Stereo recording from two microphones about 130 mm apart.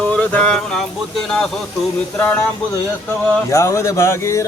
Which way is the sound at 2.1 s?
10° left (ahead or behind).